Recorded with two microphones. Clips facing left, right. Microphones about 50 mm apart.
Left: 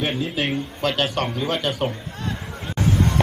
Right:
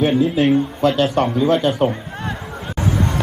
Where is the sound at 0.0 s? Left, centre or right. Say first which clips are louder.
Right 9 dB; right.